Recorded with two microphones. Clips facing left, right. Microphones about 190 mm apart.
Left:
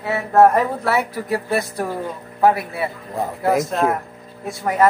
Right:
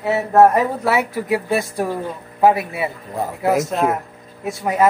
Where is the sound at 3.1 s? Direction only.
Centre (ahead or behind).